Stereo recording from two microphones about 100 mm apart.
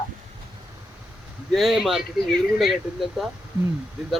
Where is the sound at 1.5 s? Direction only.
Centre (ahead or behind).